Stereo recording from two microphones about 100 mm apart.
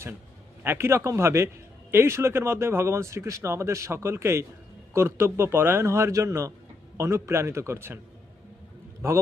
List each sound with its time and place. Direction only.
0.6 s speech: 25° right (ahead or behind)